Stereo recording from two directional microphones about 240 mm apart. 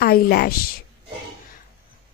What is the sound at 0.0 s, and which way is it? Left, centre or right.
Speech, left.